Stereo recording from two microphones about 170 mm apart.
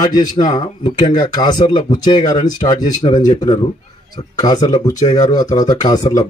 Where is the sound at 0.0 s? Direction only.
25° left (ahead or behind).